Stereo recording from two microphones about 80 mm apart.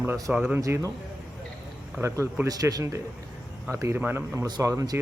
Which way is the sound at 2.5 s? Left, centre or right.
Right.